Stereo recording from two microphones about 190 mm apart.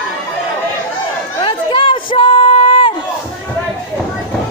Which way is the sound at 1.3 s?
25° left (ahead or behind).